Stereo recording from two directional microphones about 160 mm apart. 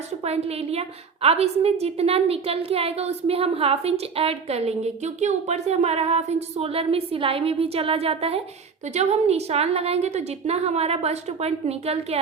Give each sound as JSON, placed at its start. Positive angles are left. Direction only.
{"t": 0.3, "sound": "a woman's voice", "side_deg": -40}